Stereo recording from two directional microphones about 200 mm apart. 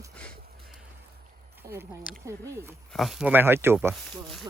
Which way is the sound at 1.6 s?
15° right (ahead or behind).